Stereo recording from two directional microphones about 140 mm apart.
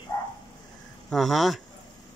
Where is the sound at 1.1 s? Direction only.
Centre (ahead or behind).